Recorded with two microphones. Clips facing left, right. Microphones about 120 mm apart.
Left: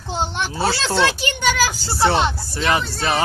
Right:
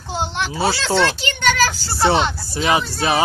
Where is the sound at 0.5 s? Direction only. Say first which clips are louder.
Right 2 dB; 10° right (ahead or behind).